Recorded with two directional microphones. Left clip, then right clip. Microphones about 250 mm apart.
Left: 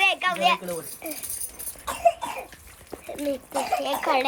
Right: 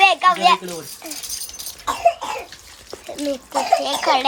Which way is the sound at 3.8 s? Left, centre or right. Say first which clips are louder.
Right 5 dB; centre.